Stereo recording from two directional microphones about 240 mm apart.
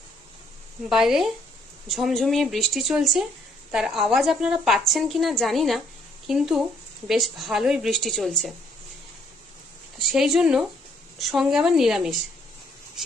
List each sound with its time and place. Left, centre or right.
0.9 s a woman's voice: centre
10.1 s a woman's voice: centre